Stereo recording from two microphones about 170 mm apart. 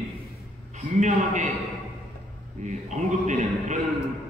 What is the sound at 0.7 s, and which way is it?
Speech, 45° right (ahead or behind).